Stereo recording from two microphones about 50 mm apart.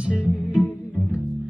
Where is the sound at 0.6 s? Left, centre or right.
Left.